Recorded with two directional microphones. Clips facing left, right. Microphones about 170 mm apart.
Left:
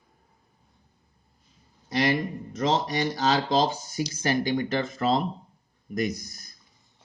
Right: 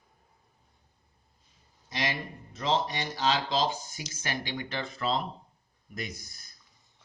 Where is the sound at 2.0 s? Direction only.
60° left (ahead or behind).